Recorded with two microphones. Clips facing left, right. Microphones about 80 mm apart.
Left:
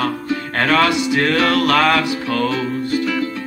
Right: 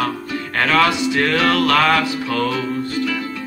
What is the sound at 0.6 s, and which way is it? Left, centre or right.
Music, left.